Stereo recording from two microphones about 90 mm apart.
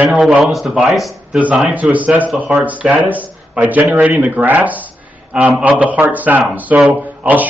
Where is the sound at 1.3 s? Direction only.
10° right (ahead or behind).